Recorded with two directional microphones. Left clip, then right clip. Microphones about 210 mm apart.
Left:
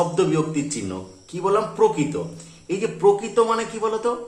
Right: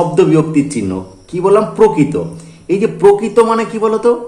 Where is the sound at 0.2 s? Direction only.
35° right (ahead or behind).